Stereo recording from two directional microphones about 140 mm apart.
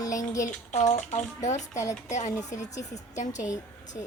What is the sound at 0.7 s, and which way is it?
Speech, 55° left (ahead or behind).